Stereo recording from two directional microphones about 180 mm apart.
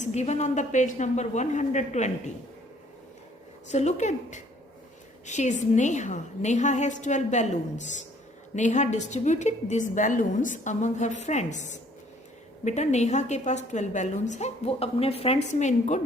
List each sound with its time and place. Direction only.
0.0 s a woman's voice: 40° left (ahead or behind)
3.7 s a woman's voice: 40° left (ahead or behind)